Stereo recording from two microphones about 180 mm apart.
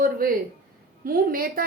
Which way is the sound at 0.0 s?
55° right (ahead or behind).